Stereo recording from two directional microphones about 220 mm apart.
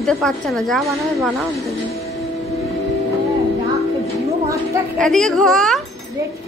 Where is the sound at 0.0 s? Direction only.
Centre (ahead or behind).